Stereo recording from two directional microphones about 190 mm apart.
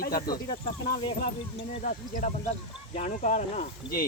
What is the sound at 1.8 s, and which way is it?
Speech, 45° left (ahead or behind).